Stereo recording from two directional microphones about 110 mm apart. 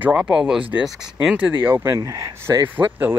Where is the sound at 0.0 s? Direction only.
10° right (ahead or behind).